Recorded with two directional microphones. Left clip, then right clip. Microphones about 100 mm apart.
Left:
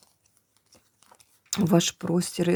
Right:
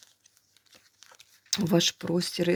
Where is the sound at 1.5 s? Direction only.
40° left (ahead or behind).